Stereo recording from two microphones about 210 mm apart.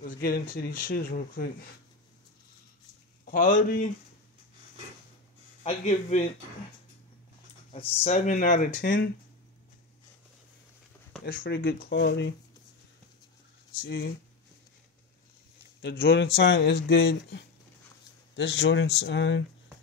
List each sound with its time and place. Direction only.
0.0 s speech: 40° left (ahead or behind)
3.3 s speech: 40° left (ahead or behind)
5.6 s speech: 30° left (ahead or behind)
7.7 s speech: 30° left (ahead or behind)
11.2 s speech: 45° left (ahead or behind)
13.8 s speech: 55° left (ahead or behind)
15.8 s speech: 55° left (ahead or behind)